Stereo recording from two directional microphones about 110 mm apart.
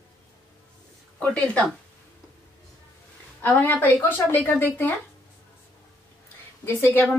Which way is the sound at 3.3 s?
15° left (ahead or behind).